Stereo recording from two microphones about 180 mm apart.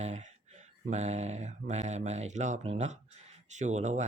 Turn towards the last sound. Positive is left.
turn(degrees=-40)  # may be behind; listen again after turning